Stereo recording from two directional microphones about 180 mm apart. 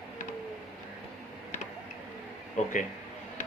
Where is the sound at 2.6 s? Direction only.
45° left (ahead or behind).